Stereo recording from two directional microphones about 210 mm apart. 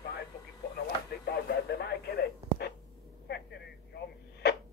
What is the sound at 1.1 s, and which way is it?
Radio, 50° left (ahead or behind).